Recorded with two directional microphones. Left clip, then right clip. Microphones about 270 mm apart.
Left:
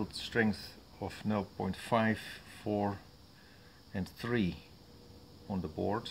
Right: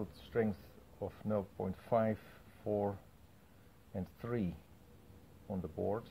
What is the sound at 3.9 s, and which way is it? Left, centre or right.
Speech, centre.